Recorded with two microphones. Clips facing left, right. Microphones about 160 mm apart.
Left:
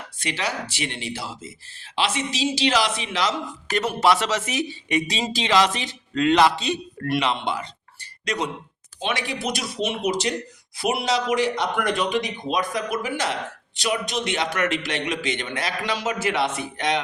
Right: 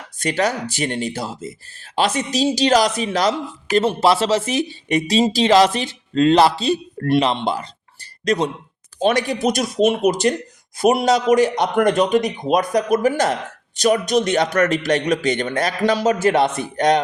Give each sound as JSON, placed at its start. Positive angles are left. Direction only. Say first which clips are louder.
{"t": 0.2, "sound": "speech", "louder": "right 8 dB", "side_deg": -45}
{"t": 3.8, "sound": "speech", "louder": "right 4 dB", "side_deg": -30}